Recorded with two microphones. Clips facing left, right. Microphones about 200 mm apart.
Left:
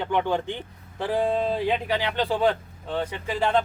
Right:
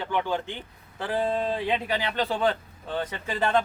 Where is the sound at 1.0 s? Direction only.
15° left (ahead or behind).